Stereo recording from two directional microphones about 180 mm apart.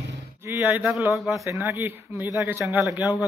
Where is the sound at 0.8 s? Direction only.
Centre (ahead or behind).